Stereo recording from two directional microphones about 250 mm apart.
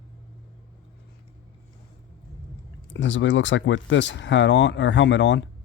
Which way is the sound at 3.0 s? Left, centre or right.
Left.